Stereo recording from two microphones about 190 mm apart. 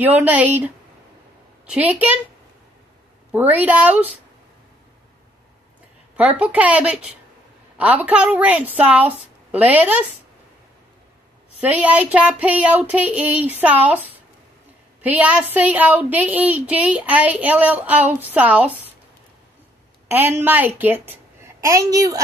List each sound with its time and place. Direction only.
0.2 s speech: 10° right (ahead or behind)
1.7 s speech: 10° right (ahead or behind)
3.3 s speech: 10° right (ahead or behind)
6.1 s speech: 5° right (ahead or behind)
11.6 s a woman's voice: 10° right (ahead or behind)
20.1 s speech: 10° right (ahead or behind)